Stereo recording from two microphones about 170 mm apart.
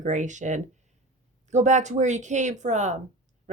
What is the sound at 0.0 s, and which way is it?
Speech, 45° right (ahead or behind).